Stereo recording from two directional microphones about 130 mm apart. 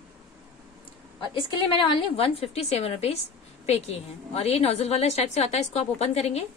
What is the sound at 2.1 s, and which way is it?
A woman's voice, 50° left (ahead or behind).